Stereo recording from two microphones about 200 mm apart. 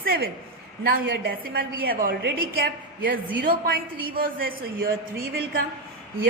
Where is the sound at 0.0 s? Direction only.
50° right (ahead or behind).